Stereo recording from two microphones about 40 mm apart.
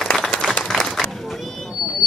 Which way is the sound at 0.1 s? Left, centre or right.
Centre.